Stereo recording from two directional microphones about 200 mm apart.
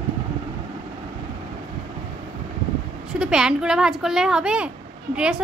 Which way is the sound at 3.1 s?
5° right (ahead or behind).